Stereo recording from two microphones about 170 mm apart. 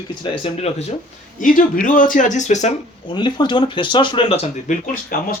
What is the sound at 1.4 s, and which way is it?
Speech, 50° left (ahead or behind).